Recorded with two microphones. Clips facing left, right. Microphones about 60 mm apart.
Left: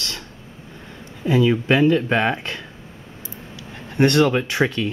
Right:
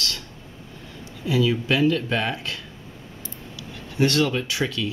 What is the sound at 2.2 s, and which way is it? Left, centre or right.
Speech, left.